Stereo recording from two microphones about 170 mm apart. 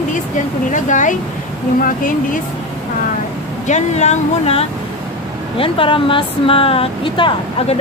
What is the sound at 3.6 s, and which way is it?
Speech, 40° left (ahead or behind).